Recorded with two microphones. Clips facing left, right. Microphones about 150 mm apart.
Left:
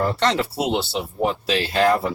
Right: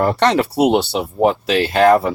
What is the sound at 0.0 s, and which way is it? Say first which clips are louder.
Speech: right 6 dB; 60° right (ahead or behind).